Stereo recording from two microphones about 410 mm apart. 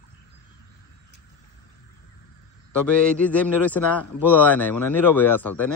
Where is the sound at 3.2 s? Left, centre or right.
Centre.